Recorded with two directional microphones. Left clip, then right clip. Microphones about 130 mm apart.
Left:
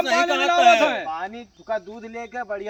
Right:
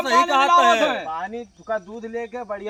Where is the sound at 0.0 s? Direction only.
20° right (ahead or behind).